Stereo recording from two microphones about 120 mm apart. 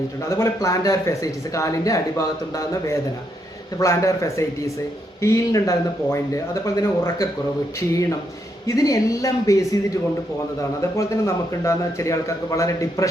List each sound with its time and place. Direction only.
0.2 s speech: 25° left (ahead or behind)
8.6 s speech: 30° left (ahead or behind)
10.9 s speech: 25° left (ahead or behind)